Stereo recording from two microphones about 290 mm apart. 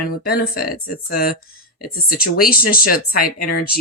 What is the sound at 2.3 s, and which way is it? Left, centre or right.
Speech, left.